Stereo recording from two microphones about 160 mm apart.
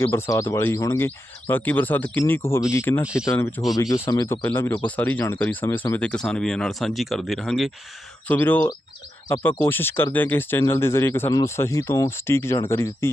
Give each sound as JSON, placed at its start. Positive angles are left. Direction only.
{"t": 0.0, "sound": "speech", "side_deg": 15}
{"t": 8.3, "sound": "speech", "side_deg": 10}